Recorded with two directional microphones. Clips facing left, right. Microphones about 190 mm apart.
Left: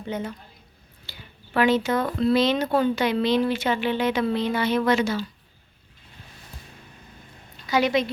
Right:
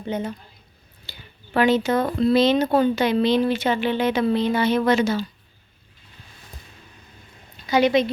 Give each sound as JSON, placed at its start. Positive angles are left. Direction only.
{"t": 0.1, "sound": "speech", "side_deg": -25}
{"t": 1.5, "sound": "speech", "side_deg": -25}
{"t": 7.7, "sound": "speech", "side_deg": -20}